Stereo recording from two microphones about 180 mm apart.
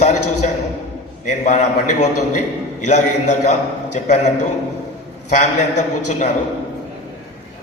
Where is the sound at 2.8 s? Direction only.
40° left (ahead or behind).